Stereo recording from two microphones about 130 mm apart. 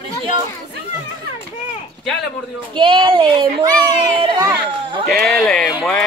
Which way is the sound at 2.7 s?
40° right (ahead or behind).